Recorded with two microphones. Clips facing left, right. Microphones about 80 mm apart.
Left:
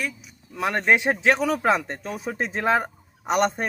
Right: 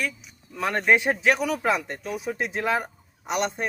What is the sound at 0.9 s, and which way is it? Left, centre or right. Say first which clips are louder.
A man's voice: left 1 dB; left.